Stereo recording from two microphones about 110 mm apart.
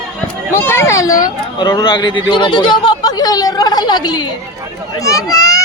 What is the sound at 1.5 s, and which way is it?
Speech, 40° left (ahead or behind).